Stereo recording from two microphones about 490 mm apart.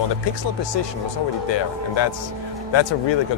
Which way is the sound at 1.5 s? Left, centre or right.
Left.